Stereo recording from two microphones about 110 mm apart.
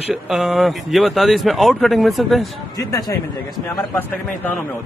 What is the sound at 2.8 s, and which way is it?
Speech, 35° left (ahead or behind).